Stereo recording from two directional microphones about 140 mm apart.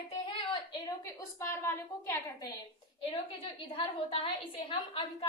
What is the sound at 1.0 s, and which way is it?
A woman's voice, 20° left (ahead or behind).